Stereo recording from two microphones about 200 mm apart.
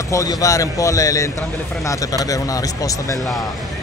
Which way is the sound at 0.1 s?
15° left (ahead or behind).